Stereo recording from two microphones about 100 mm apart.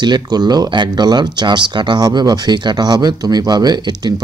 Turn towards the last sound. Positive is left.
turn(degrees=-45)  # may be behind; listen again after turning